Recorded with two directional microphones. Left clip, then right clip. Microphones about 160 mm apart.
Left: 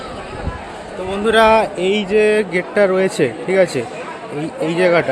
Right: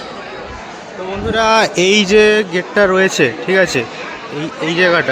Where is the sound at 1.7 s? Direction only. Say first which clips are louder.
Right 5 dB; 35° right (ahead or behind).